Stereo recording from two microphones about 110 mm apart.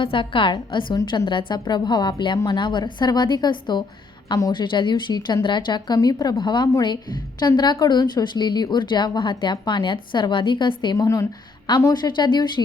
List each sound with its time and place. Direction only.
0.0 s a woman's voice: 50° left (ahead or behind)
10.9 s speech: 30° left (ahead or behind)